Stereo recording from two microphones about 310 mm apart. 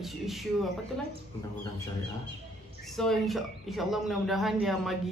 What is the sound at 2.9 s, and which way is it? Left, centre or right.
Speech, centre.